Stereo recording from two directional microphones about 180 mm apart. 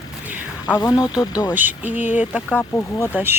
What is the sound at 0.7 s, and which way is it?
Speech, 20° left (ahead or behind).